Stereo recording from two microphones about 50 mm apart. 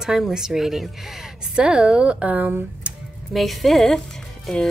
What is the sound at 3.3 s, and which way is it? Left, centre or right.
Speech, centre.